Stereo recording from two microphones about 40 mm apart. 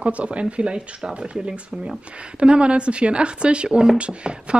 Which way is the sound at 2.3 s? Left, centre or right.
Right.